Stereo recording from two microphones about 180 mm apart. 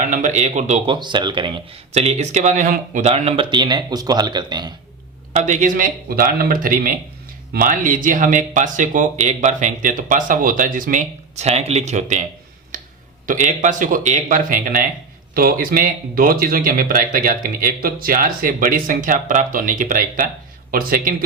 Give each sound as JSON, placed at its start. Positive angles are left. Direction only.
{"t": 0.0, "sound": "speech", "side_deg": -45}
{"t": 0.9, "sound": "speech", "side_deg": -25}
{"t": 5.3, "sound": "speech", "side_deg": -45}
{"t": 13.2, "sound": "speech", "side_deg": -45}